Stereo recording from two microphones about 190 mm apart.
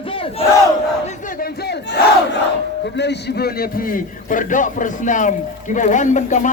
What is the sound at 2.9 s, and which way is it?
A man's voice, 65° left (ahead or behind).